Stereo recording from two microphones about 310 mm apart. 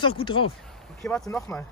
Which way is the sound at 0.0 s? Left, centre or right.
Centre.